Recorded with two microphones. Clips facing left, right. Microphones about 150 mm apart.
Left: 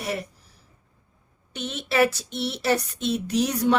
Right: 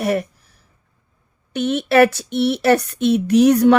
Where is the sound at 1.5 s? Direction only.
60° right (ahead or behind).